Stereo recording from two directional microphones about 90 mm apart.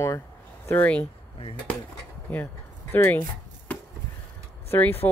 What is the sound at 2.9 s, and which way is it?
Speech, 25° left (ahead or behind).